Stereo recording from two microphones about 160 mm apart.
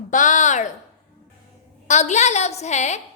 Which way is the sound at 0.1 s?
50° left (ahead or behind).